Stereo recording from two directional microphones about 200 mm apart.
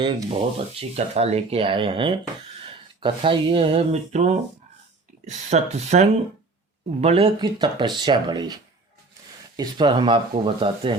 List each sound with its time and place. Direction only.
0.0 s speech: 25° right (ahead or behind)
9.6 s speech: 25° right (ahead or behind)